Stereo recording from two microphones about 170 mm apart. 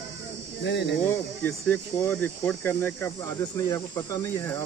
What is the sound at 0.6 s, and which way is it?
Speech, 90° left.